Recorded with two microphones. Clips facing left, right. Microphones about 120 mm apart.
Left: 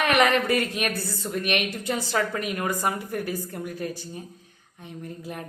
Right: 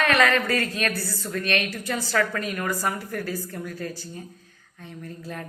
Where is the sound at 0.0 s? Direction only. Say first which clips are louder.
Even; 20° left (ahead or behind).